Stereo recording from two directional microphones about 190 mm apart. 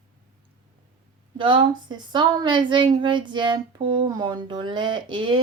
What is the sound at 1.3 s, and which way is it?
A woman's voice, 25° right (ahead or behind).